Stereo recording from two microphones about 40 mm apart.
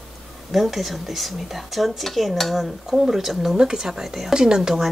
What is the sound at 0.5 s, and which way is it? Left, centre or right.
Speech, centre.